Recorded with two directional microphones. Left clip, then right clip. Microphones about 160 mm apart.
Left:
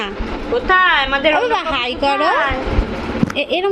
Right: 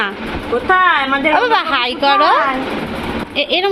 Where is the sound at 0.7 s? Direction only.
55° right (ahead or behind).